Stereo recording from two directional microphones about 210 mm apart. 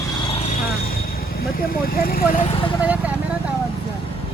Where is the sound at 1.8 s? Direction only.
45° left (ahead or behind).